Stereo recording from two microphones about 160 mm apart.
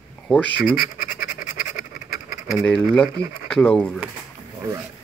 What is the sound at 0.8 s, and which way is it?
Scratch, 60° left (ahead or behind).